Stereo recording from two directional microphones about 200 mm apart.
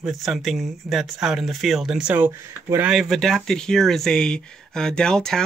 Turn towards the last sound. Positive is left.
turn(degrees=5)  # may be behind; listen again after turning